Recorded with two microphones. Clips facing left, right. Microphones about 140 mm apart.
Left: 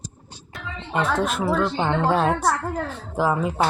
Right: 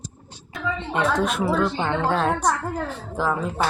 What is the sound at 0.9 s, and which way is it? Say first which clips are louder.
A woman's voice: even; centre (ahead or behind).